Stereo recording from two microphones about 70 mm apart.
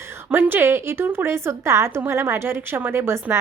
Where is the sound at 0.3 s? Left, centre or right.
Right.